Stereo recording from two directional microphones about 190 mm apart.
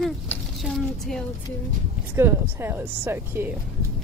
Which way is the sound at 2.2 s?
10° right (ahead or behind).